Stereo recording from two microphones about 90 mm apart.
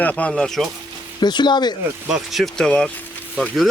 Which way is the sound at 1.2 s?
55° left (ahead or behind).